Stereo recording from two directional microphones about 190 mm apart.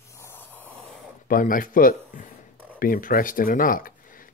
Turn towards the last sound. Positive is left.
turn(degrees=50)  # may be behind; listen again after turning